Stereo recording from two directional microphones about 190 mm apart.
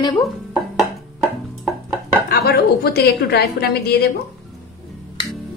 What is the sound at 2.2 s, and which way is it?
A woman's voice, 55° left (ahead or behind).